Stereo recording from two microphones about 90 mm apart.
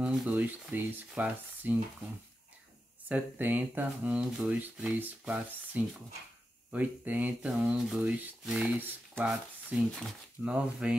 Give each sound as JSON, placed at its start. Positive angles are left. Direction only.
{"t": 0.0, "sound": "speech", "side_deg": -15}
{"t": 3.1, "sound": "speech", "side_deg": -20}
{"t": 8.0, "sound": "speech", "side_deg": -20}